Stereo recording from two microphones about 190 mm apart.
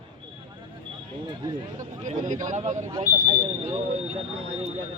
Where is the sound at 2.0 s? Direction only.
40° right (ahead or behind).